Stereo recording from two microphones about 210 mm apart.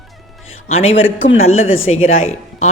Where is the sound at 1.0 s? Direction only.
65° left (ahead or behind).